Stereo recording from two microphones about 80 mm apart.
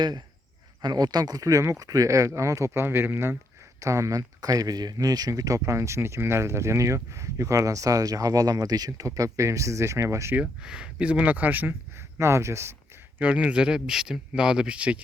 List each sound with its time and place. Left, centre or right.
0.8 s speech: right
3.8 s speech: right
10.6 s speech: centre
12.2 s speech: right
13.1 s speech: centre